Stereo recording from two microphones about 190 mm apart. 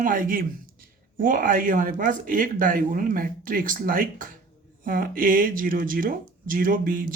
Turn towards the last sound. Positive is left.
turn(degrees=-45)  # may be behind; listen again after turning